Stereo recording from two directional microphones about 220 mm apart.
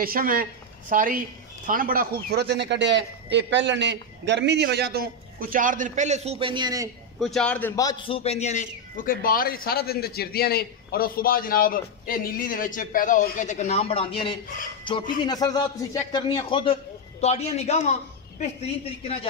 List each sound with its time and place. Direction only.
0.0 s a woman's voice: 40° right (ahead or behind); by 6.9 s 20° right (ahead or behind)
7.2 s a man's voice: centre (ahead or behind); by 17.9 s 30° left (ahead or behind)